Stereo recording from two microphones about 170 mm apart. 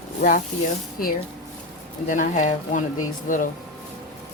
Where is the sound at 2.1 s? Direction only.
45° left (ahead or behind).